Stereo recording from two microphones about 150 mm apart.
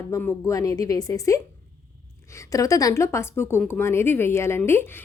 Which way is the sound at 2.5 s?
25° left (ahead or behind).